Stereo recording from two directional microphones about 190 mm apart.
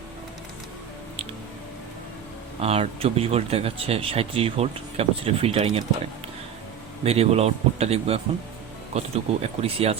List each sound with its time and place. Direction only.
2.6 s speech: 35° right (ahead or behind)
7.0 s speech: 30° right (ahead or behind)